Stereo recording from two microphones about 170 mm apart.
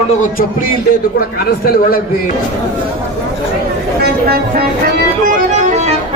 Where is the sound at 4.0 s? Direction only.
65° right (ahead or behind).